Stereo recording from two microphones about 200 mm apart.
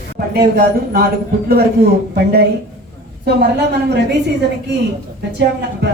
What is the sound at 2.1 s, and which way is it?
Speech, 55° right (ahead or behind).